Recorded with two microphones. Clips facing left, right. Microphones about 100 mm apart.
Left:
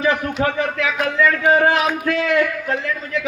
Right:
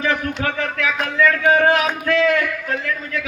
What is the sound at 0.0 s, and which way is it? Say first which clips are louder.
Speech: left 3 dB; 20° left (ahead or behind).